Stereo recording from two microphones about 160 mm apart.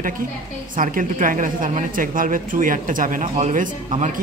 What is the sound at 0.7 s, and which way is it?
A man's voice, 55° right (ahead or behind).